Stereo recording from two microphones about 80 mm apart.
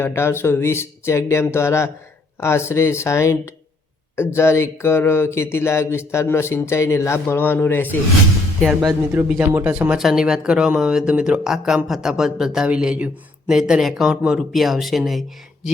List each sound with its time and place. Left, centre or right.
0.0 s a sound: left
8.6 s speech: centre
9.4 s speech: right
10.0 s speech: centre